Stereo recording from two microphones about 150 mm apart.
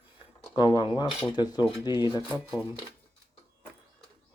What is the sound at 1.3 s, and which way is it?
Speech, 30° left (ahead or behind).